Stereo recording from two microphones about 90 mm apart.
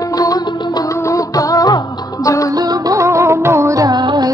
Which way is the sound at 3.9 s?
55° right (ahead or behind).